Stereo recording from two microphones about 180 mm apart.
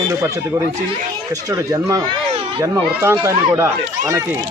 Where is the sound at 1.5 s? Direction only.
20° right (ahead or behind).